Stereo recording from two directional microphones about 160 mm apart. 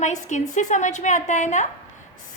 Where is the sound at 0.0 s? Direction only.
45° left (ahead or behind).